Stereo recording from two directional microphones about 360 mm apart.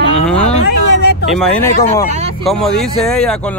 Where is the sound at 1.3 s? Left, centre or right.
Centre.